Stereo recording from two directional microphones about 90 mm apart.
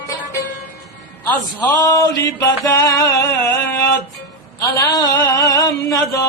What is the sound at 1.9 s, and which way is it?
Mantra, 40° left (ahead or behind).